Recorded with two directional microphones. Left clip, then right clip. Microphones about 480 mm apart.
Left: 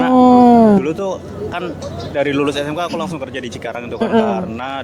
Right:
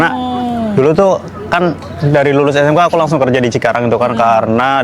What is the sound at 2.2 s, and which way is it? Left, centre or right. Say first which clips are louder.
A man's voice: right 7 dB; right.